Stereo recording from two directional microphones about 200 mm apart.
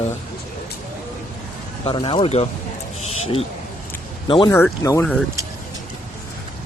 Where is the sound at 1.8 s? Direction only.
25° left (ahead or behind).